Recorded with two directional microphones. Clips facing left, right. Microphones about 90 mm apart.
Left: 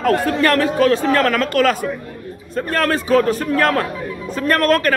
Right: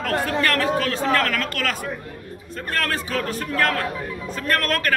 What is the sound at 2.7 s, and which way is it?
Speech, 25° left (ahead or behind).